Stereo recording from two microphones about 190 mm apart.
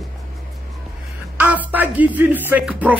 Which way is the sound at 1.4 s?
10° right (ahead or behind).